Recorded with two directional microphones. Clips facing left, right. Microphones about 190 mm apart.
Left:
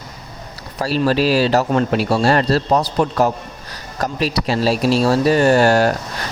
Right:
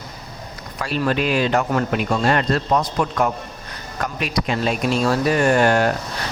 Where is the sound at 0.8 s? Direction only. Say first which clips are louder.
Left 4 dB; 35° left (ahead or behind).